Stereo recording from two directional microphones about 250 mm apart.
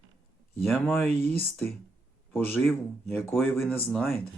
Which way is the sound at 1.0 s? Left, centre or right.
Right.